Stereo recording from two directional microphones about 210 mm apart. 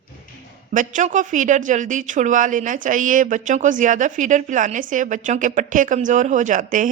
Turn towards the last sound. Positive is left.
turn(degrees=-40)  # may be behind; listen again after turning